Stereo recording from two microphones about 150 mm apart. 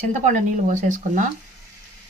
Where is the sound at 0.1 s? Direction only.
55° right (ahead or behind).